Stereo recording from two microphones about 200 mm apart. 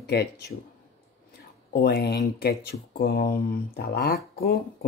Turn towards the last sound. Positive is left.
turn(degrees=50)  # may be behind; listen again after turning